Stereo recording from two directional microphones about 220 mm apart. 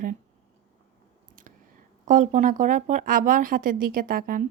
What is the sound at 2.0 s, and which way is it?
Speech, 35° right (ahead or behind).